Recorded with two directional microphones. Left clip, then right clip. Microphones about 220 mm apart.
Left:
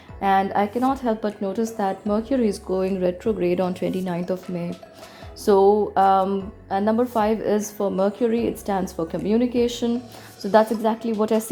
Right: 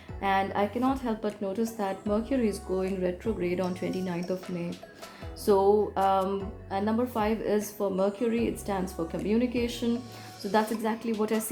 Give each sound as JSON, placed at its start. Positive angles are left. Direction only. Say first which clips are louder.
{"t": 0.2, "sound": "speech", "louder": "left 7 dB", "side_deg": 30}
{"t": 5.5, "sound": "speech", "louder": "left 6 dB", "side_deg": 30}